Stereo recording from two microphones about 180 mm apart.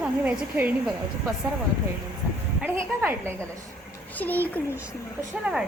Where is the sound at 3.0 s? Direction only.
15° right (ahead or behind).